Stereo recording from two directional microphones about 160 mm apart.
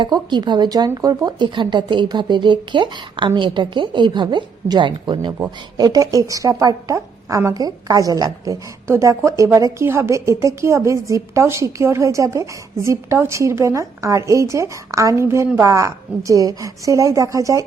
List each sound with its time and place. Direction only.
0.0 s a woman's voice: 30° right (ahead or behind)